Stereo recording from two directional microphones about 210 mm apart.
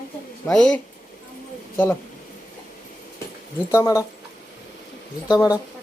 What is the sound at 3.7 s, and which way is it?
Speech, 15° left (ahead or behind).